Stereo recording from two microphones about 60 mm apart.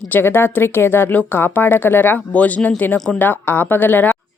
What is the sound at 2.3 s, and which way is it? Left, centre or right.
Speech, left.